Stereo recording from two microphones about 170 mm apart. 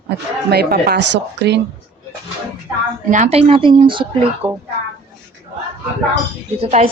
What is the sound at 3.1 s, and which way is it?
Speech, 40° right (ahead or behind).